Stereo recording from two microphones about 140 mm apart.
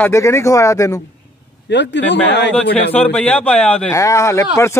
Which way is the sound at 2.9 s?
10° left (ahead or behind).